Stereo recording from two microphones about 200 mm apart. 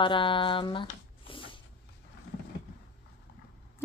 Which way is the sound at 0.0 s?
25° left (ahead or behind).